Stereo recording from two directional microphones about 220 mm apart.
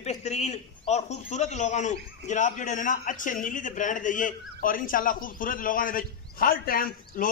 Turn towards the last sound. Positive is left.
turn(degrees=40)  # may be behind; listen again after turning